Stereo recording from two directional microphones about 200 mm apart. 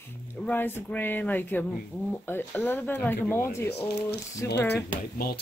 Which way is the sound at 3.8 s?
55° left (ahead or behind).